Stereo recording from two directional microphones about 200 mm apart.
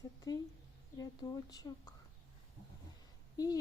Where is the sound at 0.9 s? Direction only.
20° left (ahead or behind).